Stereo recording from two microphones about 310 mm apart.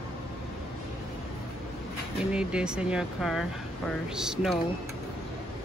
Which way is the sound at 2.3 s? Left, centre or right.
Centre.